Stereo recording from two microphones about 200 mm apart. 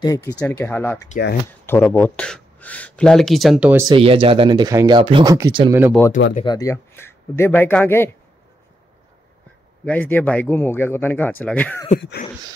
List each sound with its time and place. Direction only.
0.0 s speech: 15° left (ahead or behind); by 3.8 s 5° right (ahead or behind)
3.8 s speech: 25° right (ahead or behind); by 5.9 s 10° right (ahead or behind)
6.4 s speech: 20° left (ahead or behind)
9.8 s speech: 10° left (ahead or behind)
12.0 s speech: 55° left (ahead or behind)